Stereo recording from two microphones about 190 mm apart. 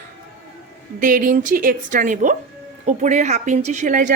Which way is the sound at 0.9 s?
45° right (ahead or behind).